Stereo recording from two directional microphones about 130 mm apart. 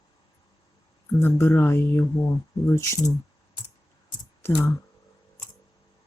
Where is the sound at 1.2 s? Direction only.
20° left (ahead or behind).